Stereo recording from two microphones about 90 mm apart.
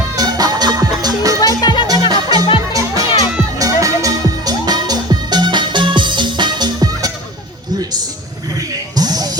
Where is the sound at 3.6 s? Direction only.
40° right (ahead or behind).